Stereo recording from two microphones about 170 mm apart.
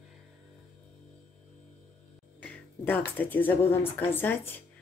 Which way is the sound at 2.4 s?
10° left (ahead or behind).